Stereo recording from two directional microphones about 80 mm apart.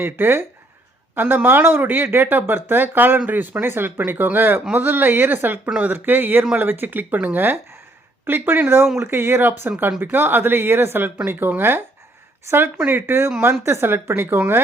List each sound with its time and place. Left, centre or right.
0.0 s speech: right